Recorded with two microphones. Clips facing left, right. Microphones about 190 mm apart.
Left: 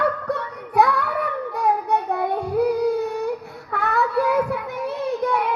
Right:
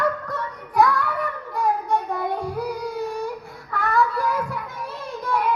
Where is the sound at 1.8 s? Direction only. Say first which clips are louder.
Left 2 dB; 65° left (ahead or behind).